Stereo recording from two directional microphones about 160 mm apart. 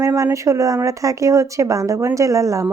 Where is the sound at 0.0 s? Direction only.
20° right (ahead or behind).